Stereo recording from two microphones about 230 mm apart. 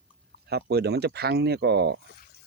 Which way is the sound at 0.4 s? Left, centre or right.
Right.